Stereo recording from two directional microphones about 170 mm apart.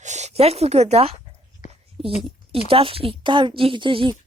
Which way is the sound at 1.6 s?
50° left (ahead or behind).